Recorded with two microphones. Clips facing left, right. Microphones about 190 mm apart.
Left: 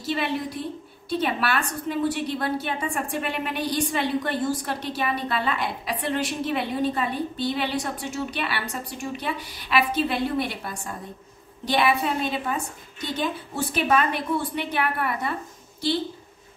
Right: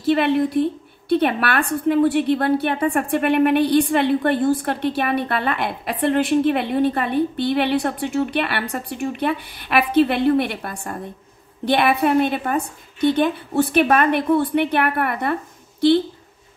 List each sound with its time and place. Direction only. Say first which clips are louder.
0.0 s a woman's voice: right 9 dB; 55° right (ahead or behind)